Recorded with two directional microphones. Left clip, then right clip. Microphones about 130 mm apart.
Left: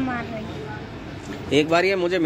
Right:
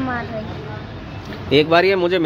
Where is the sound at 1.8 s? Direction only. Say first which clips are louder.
Right 5 dB; 35° right (ahead or behind).